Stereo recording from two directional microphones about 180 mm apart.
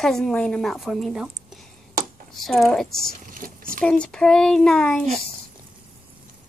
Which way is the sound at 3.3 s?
50° right (ahead or behind).